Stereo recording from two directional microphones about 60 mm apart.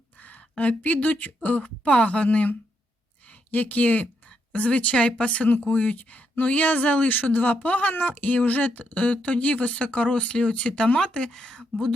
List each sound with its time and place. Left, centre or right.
0.2 s speech: left